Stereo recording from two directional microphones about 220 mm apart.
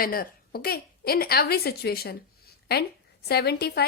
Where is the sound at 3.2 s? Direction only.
45° left (ahead or behind).